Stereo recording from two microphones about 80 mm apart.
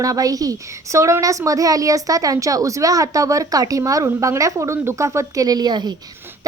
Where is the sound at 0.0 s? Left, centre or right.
Right.